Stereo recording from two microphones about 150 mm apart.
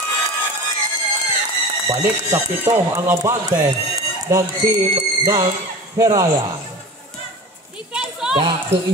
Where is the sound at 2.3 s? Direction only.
20° right (ahead or behind).